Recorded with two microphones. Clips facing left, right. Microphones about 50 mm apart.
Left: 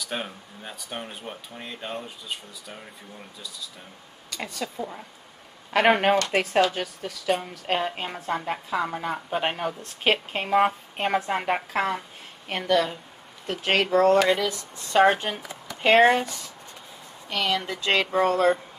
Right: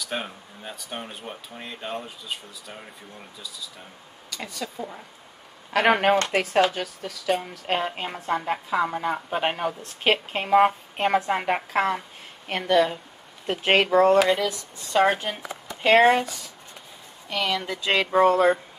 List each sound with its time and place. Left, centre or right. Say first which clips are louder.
0.0 s speech: right 1 dB; centre
4.3 s speech: left 1 dB; centre
12.6 s speech: right 3 dB; centre
14.1 s speech: right 1 dB; centre
16.1 s speech: right 2 dB; centre